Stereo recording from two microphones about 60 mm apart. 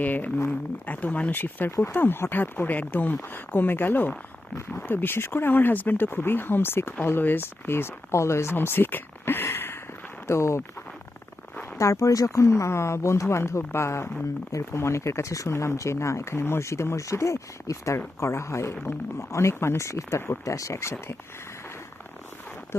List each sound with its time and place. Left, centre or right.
0.0 s speech: left
8.5 s speech: left
10.2 s speech: left
11.8 s speech: left
20.4 s speech: left